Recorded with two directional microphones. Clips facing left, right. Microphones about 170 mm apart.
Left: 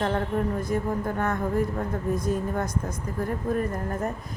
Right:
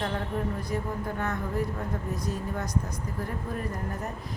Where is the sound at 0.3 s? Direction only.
45° left (ahead or behind).